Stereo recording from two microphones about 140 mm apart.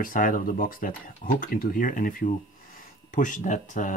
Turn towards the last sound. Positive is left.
turn(degrees=60)  # may be behind; listen again after turning